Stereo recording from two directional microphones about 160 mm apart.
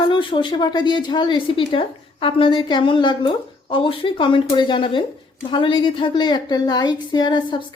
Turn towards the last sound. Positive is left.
turn(degrees=30)  # may be behind; listen again after turning